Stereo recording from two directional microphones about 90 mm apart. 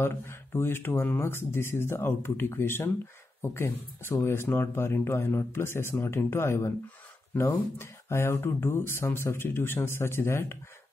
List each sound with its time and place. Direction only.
0.0 s speech: 25° left (ahead or behind)